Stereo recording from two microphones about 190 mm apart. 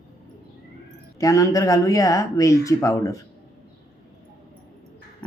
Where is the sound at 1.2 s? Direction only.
15° left (ahead or behind).